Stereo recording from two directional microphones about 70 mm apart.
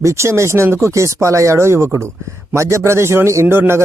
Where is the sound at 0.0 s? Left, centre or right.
Right.